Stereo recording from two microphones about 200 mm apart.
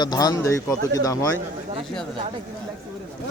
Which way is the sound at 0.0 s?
20° left (ahead or behind).